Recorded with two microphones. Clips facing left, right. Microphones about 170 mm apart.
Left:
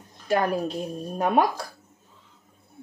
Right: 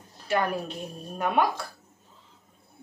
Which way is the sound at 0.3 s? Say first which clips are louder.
Left 4 dB; 40° left (ahead or behind).